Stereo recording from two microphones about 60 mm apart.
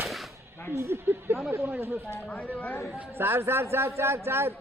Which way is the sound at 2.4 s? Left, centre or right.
Left.